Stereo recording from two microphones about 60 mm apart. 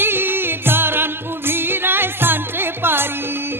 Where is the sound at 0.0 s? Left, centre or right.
Right.